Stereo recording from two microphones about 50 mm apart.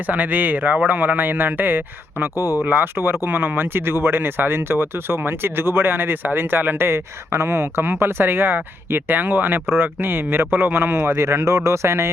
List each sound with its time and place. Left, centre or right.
0.1 s a man's voice: right
2.8 s speech: right